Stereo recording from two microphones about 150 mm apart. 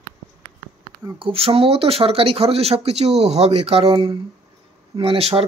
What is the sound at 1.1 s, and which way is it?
Speech, 40° right (ahead or behind).